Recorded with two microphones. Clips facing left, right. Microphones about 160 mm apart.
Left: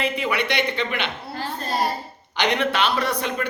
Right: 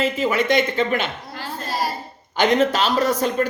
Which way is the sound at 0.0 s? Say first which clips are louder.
Right 4 dB; 40° right (ahead or behind).